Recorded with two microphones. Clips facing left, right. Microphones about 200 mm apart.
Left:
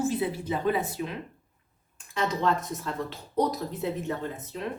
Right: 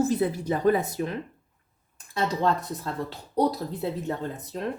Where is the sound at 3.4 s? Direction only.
30° right (ahead or behind).